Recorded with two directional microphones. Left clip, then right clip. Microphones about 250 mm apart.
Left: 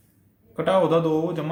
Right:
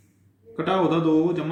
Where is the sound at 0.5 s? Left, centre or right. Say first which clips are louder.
Left 2 dB; left.